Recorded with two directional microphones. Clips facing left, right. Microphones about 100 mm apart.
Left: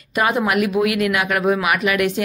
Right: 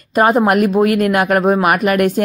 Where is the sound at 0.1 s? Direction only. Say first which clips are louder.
Right 6 dB; 45° right (ahead or behind).